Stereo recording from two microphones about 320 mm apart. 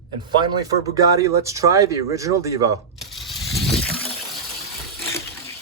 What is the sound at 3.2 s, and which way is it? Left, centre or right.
Crushing, centre.